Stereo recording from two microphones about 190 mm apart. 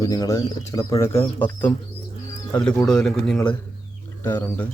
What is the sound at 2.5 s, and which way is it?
Speech, 5° left (ahead or behind).